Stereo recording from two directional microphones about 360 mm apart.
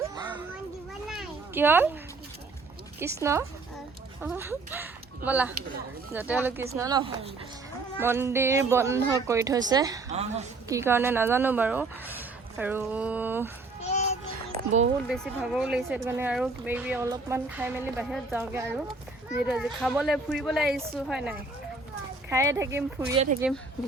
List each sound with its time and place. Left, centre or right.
0.2 s children playing: centre
1.0 s children playing: centre
3.0 s speech: centre
14.5 s a sound: centre
15.1 s speech: centre